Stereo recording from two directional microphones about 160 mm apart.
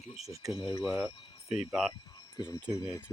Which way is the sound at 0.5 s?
25° left (ahead or behind).